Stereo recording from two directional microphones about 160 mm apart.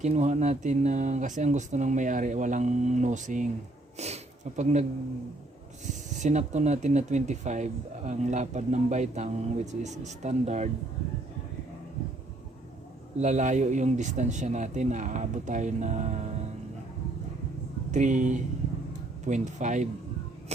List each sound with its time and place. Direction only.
0.0 s speech: 45° right (ahead or behind)
13.1 s speech: 45° right (ahead or behind)
17.9 s speech: 50° right (ahead or behind)